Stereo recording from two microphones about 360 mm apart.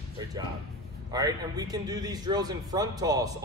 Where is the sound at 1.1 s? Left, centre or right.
Centre.